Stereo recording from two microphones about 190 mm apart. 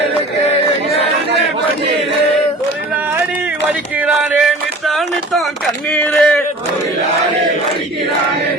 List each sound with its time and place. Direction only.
3.7 s speech: 5° right (ahead or behind)